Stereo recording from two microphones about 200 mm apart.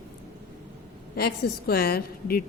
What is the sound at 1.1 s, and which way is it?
A woman's voice, 50° left (ahead or behind).